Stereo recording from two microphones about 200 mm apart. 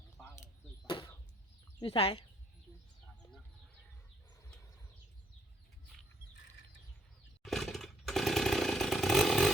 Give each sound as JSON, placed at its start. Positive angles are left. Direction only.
{"t": 1.8, "sound": "speech", "side_deg": 30}
{"t": 7.4, "sound": "chainsaw", "side_deg": 0}